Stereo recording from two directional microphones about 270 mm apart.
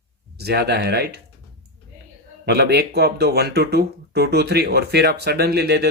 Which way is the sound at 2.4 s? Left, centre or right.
Right.